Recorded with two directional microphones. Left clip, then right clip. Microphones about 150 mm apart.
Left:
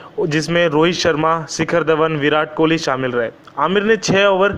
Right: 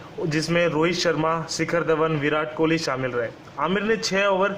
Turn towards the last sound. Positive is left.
turn(degrees=25)  # may be behind; listen again after turning